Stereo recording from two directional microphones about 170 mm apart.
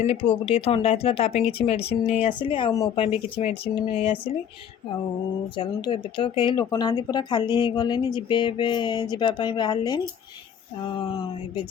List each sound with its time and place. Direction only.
0.4 s speech: 35° left (ahead or behind)
5.5 s speech: 30° left (ahead or behind)